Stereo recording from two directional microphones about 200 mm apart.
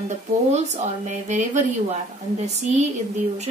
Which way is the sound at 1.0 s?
35° right (ahead or behind).